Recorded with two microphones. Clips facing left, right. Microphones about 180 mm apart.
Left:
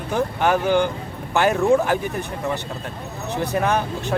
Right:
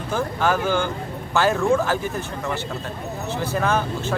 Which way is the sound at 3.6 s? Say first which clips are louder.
Left 1 dB; 15° left (ahead or behind).